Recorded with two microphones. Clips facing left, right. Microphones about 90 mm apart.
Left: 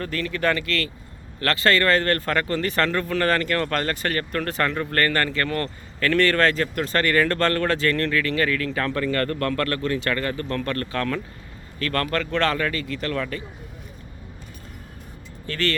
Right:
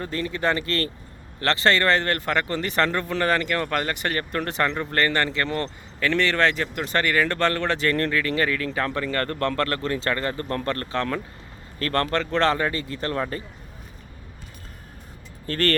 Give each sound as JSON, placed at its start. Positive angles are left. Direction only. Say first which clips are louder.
{"t": 0.0, "sound": "speech", "louder": "left 1 dB", "side_deg": -20}
{"t": 9.1, "sound": "speech", "louder": "left 1 dB", "side_deg": -25}
{"t": 15.4, "sound": "speech", "louder": "right 2 dB", "side_deg": -45}